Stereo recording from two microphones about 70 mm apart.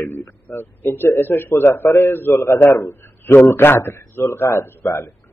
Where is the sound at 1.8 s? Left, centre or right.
Left.